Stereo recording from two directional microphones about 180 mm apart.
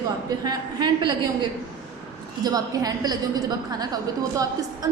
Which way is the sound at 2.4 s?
20° right (ahead or behind).